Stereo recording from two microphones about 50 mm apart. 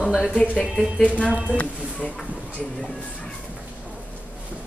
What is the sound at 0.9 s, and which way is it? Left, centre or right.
Speech, left.